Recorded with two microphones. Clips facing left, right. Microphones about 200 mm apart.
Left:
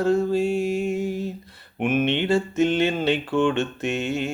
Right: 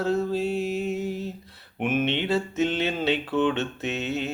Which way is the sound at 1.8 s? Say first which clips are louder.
Left 3 dB; 5° left (ahead or behind).